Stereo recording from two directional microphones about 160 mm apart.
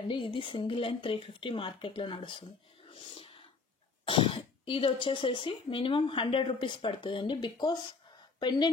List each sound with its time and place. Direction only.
0.1 s speech: 30° left (ahead or behind)
2.9 s a sound: 35° left (ahead or behind)
4.0 s speech: 35° left (ahead or behind)